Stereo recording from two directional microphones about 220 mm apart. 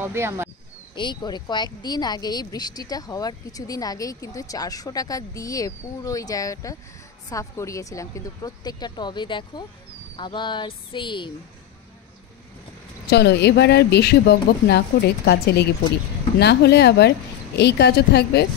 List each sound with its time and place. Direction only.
0.0 s speech: 10° right (ahead or behind)
0.9 s speech: 20° left (ahead or behind)
13.1 s speech: 50° left (ahead or behind)